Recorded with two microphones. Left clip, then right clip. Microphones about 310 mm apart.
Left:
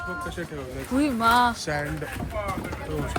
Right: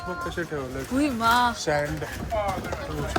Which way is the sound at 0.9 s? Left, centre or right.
Centre.